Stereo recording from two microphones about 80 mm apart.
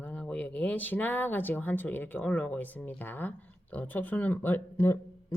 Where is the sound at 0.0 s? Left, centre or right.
Centre.